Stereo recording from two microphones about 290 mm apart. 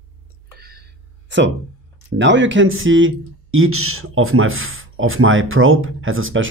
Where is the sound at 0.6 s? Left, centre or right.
Right.